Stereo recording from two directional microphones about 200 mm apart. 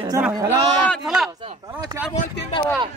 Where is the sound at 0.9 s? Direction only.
Centre (ahead or behind).